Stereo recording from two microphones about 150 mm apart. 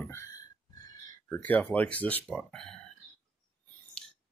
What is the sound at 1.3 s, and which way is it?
Speech, 10° left (ahead or behind).